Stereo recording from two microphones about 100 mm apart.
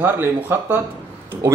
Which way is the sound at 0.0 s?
20° right (ahead or behind).